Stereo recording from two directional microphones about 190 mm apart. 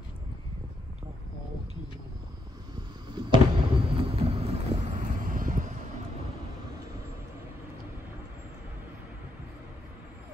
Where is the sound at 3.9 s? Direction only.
30° right (ahead or behind).